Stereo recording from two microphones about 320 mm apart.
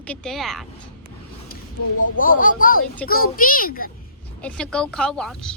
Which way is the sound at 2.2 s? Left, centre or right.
Left.